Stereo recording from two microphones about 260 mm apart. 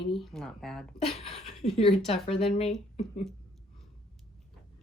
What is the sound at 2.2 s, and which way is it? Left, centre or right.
Speech, left.